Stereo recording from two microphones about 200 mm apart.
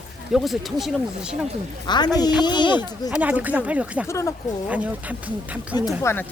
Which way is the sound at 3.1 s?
10° right (ahead or behind).